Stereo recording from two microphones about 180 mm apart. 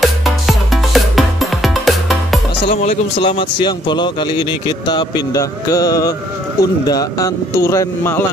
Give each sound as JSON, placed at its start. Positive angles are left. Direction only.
{"t": 0.0, "sound": "music", "side_deg": 0}
{"t": 2.7, "sound": "a man's voice", "side_deg": 40}